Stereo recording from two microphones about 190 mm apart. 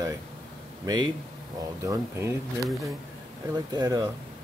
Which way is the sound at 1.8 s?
15° right (ahead or behind).